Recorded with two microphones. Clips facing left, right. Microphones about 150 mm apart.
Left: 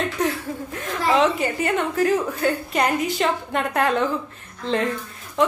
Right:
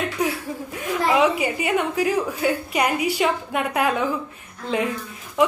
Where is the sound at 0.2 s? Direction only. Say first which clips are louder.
Left 1 dB; 10° right (ahead or behind).